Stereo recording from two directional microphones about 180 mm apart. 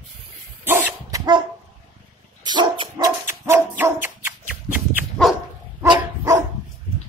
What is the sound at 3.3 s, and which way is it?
Dog, 15° right (ahead or behind).